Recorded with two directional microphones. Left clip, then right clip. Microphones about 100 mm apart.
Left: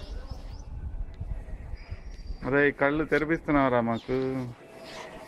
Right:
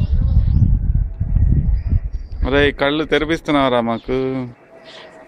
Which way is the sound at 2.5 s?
25° right (ahead or behind).